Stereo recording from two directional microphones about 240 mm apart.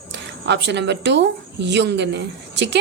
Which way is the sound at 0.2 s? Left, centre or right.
Right.